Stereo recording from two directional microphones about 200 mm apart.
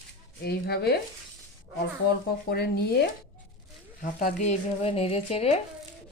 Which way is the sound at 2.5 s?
50° left (ahead or behind).